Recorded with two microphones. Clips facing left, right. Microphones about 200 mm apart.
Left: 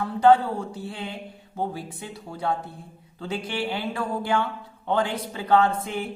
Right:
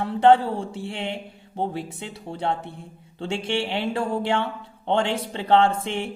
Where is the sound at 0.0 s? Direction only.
25° right (ahead or behind).